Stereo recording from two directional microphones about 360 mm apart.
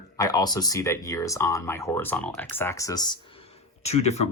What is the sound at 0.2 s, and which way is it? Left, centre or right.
Speech, centre.